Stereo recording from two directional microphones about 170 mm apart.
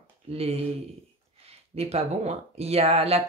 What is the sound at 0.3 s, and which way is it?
Speech, 35° right (ahead or behind).